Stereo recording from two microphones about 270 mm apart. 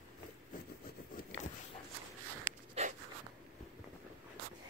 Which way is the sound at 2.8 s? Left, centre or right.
Right.